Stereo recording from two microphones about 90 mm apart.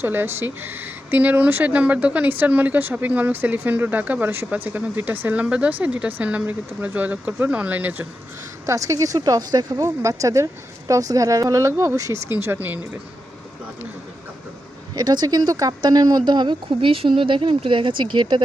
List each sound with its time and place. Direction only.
0.0 s speech: 25° right (ahead or behind)
8.6 s speech: 35° right (ahead or behind)
12.3 s speech: 25° right (ahead or behind)
14.9 s speech: 50° right (ahead or behind)